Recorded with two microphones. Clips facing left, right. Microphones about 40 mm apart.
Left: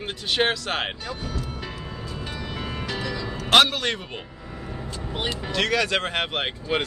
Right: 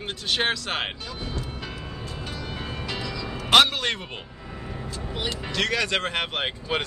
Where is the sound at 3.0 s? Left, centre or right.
Left.